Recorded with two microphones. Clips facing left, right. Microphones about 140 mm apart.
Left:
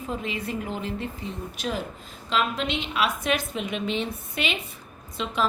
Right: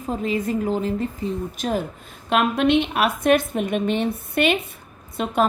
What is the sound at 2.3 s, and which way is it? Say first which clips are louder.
A woman's voice: right 8 dB; 55° right (ahead or behind).